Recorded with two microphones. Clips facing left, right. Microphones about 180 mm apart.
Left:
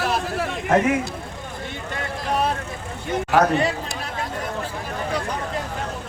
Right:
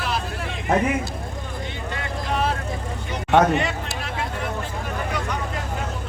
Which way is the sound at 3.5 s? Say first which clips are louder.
Left 2 dB; 35° left (ahead or behind).